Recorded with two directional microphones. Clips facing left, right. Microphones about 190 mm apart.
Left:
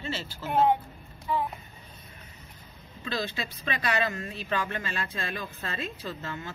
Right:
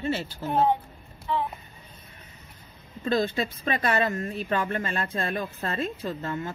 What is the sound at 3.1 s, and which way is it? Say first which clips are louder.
A woman's voice: right 8 dB; 50° right (ahead or behind).